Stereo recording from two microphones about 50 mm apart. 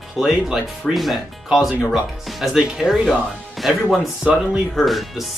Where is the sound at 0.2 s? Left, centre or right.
Centre.